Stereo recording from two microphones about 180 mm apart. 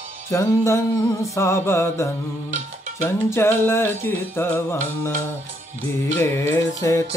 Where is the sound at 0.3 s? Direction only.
15° left (ahead or behind).